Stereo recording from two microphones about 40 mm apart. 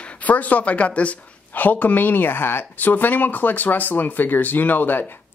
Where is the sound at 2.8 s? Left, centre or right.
Left.